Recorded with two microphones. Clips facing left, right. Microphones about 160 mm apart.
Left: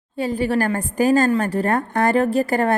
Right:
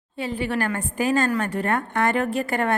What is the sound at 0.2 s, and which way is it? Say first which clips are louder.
A woman's voice: left 5 dB; 40° left (ahead or behind).